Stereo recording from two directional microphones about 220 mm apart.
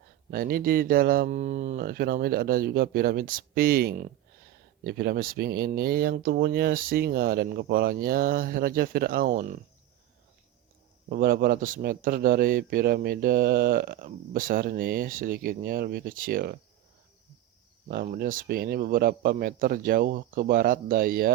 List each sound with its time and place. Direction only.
0.3 s speech: 45° right (ahead or behind)
11.1 s speech: 40° right (ahead or behind)
17.9 s speech: 40° right (ahead or behind)